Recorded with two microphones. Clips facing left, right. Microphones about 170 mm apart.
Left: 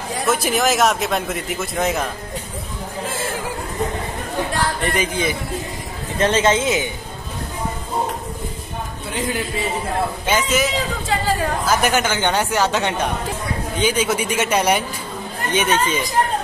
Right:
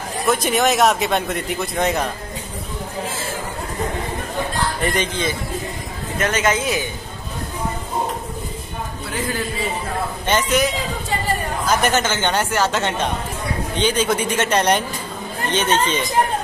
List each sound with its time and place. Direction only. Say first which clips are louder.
0.3 s speech: right 1 dB; centre (ahead or behind)
4.8 s speech: right 1 dB; 5° left (ahead or behind)
6.1 s speech: left 3 dB; 30° left (ahead or behind)
9.1 s a man's voice: left 2 dB; 20° left (ahead or behind)
10.2 s speech: right 3 dB; 5° left (ahead or behind)